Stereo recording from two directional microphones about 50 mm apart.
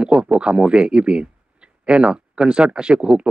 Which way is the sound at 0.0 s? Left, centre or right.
Right.